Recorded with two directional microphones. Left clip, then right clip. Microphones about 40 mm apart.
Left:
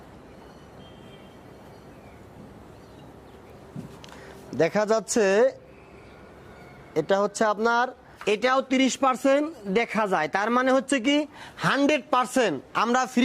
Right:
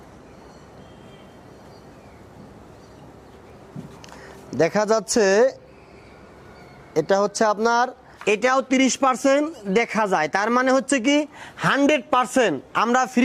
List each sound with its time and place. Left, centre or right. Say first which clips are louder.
4.5 s speech: right 3 dB; right
6.9 s speech: right 4 dB; right